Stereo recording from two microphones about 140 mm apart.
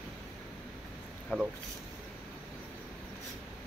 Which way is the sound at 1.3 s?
5° left (ahead or behind).